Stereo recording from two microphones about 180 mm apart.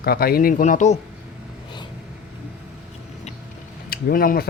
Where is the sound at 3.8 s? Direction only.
55° left (ahead or behind).